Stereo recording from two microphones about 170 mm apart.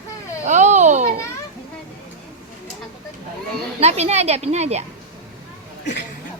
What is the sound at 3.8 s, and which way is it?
A woman's voice, 40° right (ahead or behind).